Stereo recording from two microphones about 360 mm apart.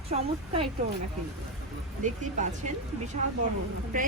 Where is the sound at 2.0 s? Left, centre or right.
Right.